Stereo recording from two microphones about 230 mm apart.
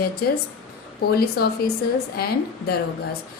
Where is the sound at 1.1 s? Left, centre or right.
Left.